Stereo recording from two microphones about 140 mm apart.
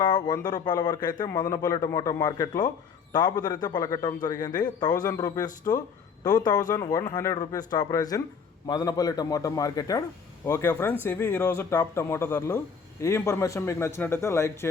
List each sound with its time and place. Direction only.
0.0 s a man's voice: 30° left (ahead or behind)